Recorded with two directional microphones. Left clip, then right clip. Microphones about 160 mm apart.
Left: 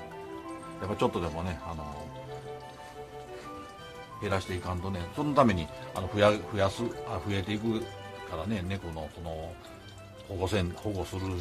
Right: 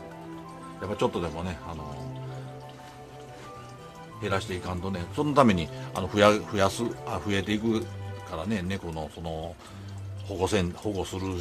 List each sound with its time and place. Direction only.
0.7 s speech: 5° left (ahead or behind)
4.2 s speech: centre (ahead or behind); by 9.3 s 25° right (ahead or behind)
10.4 s speech: 20° right (ahead or behind)